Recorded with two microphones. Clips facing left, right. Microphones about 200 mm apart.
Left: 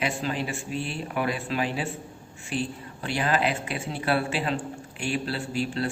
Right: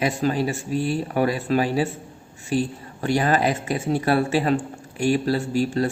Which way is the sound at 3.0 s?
45° right (ahead or behind).